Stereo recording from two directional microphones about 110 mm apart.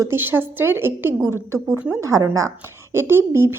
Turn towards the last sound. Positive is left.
turn(degrees=-20)  # may be behind; listen again after turning